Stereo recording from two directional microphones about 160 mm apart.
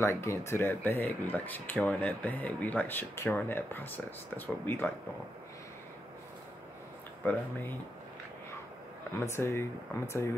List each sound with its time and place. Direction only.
0.0 s speech: 15° left (ahead or behind)
9.2 s speech: 15° left (ahead or behind)